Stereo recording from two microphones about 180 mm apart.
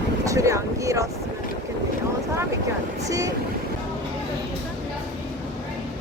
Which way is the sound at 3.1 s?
20° right (ahead or behind).